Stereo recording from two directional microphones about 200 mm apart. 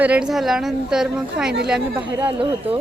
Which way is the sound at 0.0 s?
5° right (ahead or behind).